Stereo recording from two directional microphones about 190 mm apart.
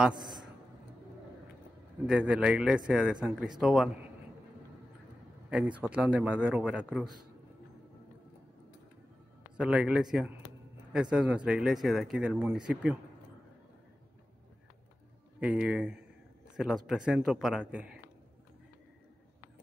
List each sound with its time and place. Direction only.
0.1 s a man's voice: 25° right (ahead or behind)
2.0 s speech: 5° right (ahead or behind)
5.5 s a man's voice: 5° right (ahead or behind)
9.6 s speech: 5° right (ahead or behind)
15.4 s speech: 5° right (ahead or behind)